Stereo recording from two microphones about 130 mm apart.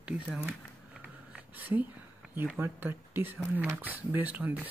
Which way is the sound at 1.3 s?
15° right (ahead or behind).